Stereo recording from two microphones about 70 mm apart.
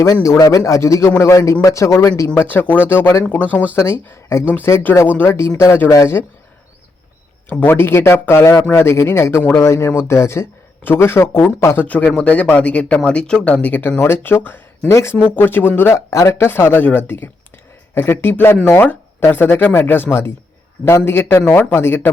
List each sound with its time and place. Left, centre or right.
0.0 s a man's voice: left
3.8 s a man's voice: left
5.5 s a man's voice: left
5.9 s speech: left
7.5 s a man's voice: left
11.9 s a man's voice: left
16.3 s a man's voice: left